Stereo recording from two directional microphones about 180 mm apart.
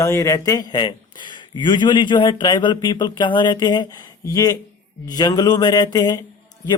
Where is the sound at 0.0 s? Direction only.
15° left (ahead or behind).